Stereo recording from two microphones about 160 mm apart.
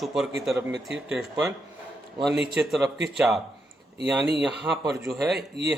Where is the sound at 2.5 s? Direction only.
Centre (ahead or behind).